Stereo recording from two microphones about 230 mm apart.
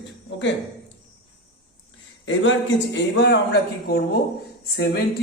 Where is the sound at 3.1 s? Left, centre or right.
Left.